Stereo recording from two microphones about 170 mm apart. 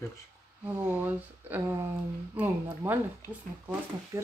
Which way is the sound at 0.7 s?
10° right (ahead or behind).